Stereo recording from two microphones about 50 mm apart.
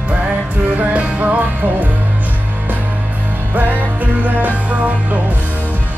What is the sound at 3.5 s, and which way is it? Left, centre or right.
Music, right.